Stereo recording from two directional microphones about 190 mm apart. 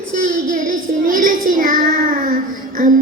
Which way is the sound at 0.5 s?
45° right (ahead or behind).